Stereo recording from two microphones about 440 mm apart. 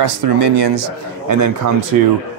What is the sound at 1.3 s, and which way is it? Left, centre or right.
Speech, right.